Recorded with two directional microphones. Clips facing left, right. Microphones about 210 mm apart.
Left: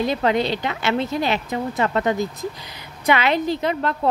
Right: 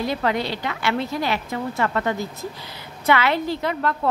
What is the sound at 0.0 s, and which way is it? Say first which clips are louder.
A woman's voice: left 3 dB; 20° left (ahead or behind).